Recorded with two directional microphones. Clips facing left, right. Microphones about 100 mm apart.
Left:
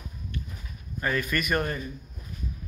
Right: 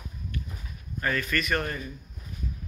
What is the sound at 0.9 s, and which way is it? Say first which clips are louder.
Speech: left 1 dB; 20° left (ahead or behind).